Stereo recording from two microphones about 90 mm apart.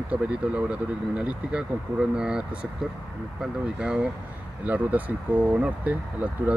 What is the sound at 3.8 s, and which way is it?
Speech, 15° right (ahead or behind).